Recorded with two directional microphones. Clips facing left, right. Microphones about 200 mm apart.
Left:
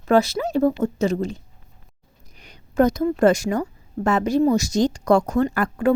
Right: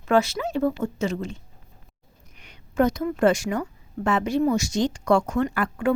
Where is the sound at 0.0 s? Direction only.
35° left (ahead or behind).